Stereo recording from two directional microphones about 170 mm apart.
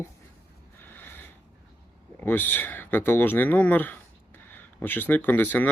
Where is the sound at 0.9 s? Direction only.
10° left (ahead or behind).